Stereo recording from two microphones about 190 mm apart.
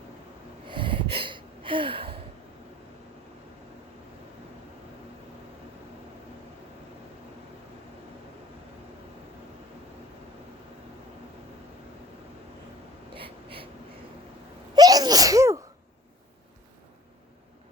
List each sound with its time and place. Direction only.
0.7 s gasp: 25° right (ahead or behind)
13.1 s a sound: 30° right (ahead or behind)
14.8 s sneeze: 20° right (ahead or behind)